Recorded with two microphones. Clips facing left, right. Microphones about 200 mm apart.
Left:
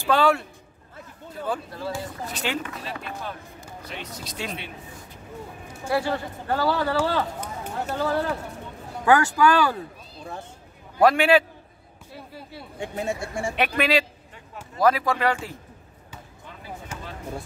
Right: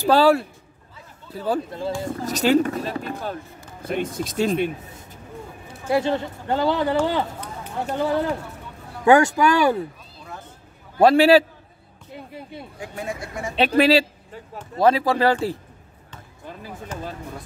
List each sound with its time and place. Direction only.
0.0 s speech: 35° right (ahead or behind)
1.5 s speech: 35° right (ahead or behind)
3.8 s speech: 50° right (ahead or behind)
5.9 s a man's voice: 20° right (ahead or behind)
11.0 s speech: 30° right (ahead or behind)
12.1 s a man's voice: 20° right (ahead or behind)
12.7 s speech: 25° left (ahead or behind)
13.6 s speech: 30° right (ahead or behind)
16.9 s basketball bounce: 10° left (ahead or behind)